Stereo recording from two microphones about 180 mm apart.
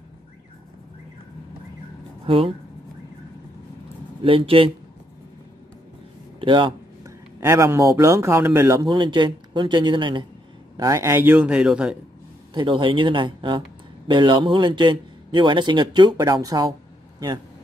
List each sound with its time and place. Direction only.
2.2 s speech: 30° right (ahead or behind)
4.2 s speech: 30° right (ahead or behind)
6.4 s speech: 25° right (ahead or behind)
7.0 s speech: 15° right (ahead or behind)
12.5 s a man's voice: 25° right (ahead or behind)